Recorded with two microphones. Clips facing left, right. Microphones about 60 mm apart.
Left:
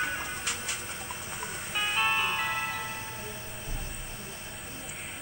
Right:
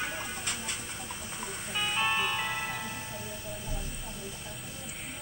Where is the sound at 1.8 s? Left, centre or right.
Left.